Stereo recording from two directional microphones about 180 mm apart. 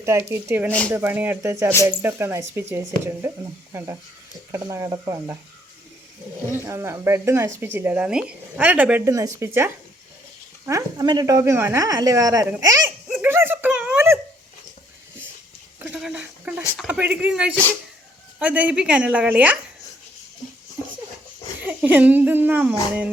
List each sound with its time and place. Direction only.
0.0 s speech: 15° right (ahead or behind)
6.5 s speech: 15° right (ahead or behind)
12.5 s a sound: 15° right (ahead or behind)
15.8 s a sound: 5° right (ahead or behind)
16.7 s speech: 5° right (ahead or behind)
17.5 s speech: 10° left (ahead or behind)
18.3 s speech: 10° right (ahead or behind)
21.6 s speech: 10° right (ahead or behind)